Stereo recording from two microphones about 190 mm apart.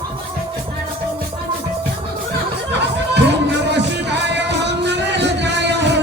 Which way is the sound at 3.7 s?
65° right (ahead or behind).